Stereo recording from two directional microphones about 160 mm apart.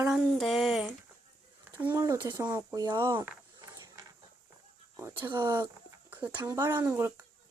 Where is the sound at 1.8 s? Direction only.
15° right (ahead or behind).